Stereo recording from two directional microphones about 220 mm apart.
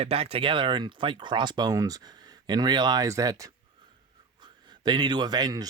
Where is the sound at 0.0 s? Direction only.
25° right (ahead or behind).